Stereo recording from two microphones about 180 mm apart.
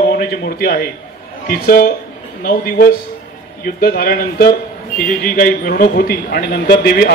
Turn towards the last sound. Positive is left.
turn(degrees=60)  # may be behind; listen again after turning